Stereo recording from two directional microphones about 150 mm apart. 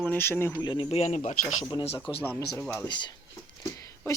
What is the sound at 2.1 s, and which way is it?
Speech, 30° left (ahead or behind).